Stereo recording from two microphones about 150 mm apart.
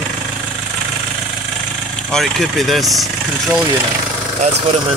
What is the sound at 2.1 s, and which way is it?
Speech, centre (ahead or behind).